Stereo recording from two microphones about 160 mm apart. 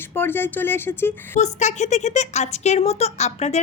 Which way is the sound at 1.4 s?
45° left (ahead or behind).